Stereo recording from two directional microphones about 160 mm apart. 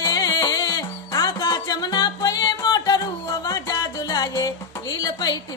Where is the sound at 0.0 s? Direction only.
25° left (ahead or behind).